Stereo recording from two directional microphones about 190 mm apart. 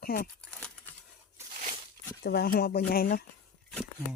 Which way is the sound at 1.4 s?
40° right (ahead or behind).